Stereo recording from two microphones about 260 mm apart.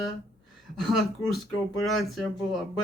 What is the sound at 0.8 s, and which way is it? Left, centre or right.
Speech, centre.